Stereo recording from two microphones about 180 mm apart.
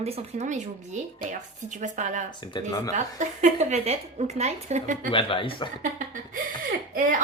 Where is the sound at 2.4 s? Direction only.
20° left (ahead or behind).